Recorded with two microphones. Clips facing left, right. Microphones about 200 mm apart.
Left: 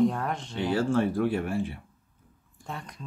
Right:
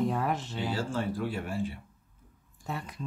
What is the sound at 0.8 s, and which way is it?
Speech, 55° left (ahead or behind).